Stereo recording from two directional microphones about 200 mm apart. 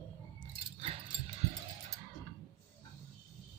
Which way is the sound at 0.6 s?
30° right (ahead or behind).